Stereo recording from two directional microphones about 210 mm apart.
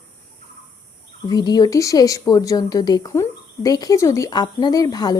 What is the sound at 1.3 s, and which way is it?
Speech, 20° left (ahead or behind).